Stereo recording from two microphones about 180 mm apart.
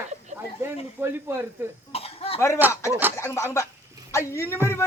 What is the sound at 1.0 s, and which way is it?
Speech, 10° right (ahead or behind).